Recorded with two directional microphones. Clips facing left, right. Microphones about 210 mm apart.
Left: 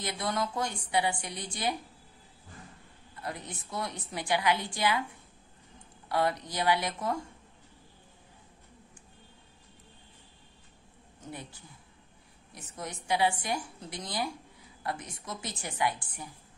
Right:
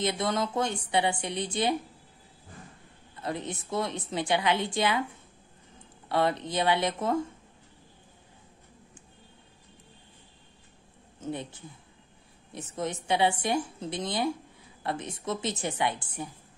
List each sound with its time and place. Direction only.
0.0 s a woman's voice: 25° right (ahead or behind)
3.2 s a woman's voice: 25° right (ahead or behind)
6.0 s a woman's voice: 25° right (ahead or behind)
11.1 s a man's voice: 25° right (ahead or behind)